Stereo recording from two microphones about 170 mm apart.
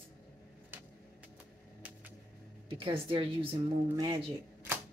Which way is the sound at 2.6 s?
30° right (ahead or behind).